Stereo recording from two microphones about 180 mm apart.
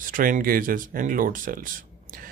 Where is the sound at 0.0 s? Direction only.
50° right (ahead or behind).